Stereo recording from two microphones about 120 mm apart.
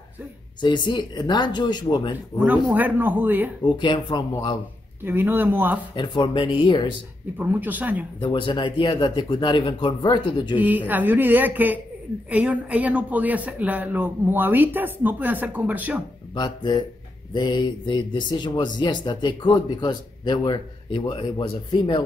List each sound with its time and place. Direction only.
0.6 s speech: 40° left (ahead or behind)
2.3 s speech: 15° right (ahead or behind)
3.6 s speech: 40° left (ahead or behind)
5.0 s speech: 15° right (ahead or behind)
5.9 s speech: 40° left (ahead or behind)
7.3 s speech: 15° right (ahead or behind)
8.2 s speech: 45° left (ahead or behind)
10.5 s speech: 15° right (ahead or behind)
16.3 s speech: 40° left (ahead or behind)